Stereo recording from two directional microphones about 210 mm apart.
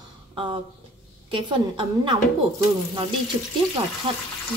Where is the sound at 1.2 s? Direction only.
25° right (ahead or behind).